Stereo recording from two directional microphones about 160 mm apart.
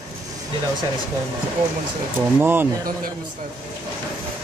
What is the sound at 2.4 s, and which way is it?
Speech, 10° right (ahead or behind).